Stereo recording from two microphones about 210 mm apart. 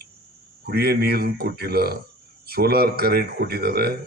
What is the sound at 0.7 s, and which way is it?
A man's voice, 50° right (ahead or behind).